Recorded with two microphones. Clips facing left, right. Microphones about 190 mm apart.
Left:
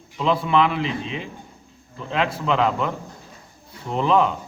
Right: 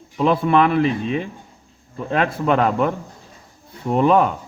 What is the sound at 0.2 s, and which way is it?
Speech, 50° right (ahead or behind).